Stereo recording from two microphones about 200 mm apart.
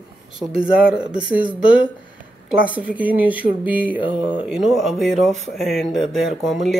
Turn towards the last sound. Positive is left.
turn(degrees=0)  # may be behind; listen again after turning